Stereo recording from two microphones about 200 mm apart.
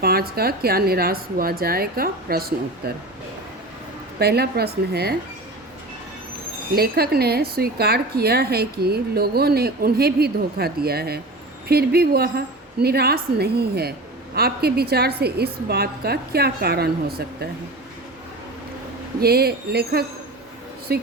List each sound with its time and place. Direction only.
0.0 s speech: 50° right (ahead or behind)
4.2 s speech: 55° right (ahead or behind)
6.7 s speech: 50° right (ahead or behind)
19.2 s speech: 50° right (ahead or behind)